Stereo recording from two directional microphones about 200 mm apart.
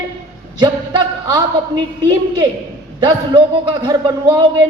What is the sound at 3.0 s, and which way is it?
Speech, 25° right (ahead or behind).